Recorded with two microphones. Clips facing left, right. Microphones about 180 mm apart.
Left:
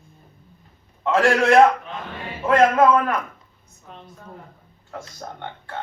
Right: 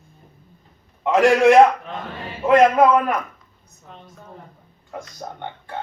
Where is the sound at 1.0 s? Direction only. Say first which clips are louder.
Right 4 dB; 15° right (ahead or behind).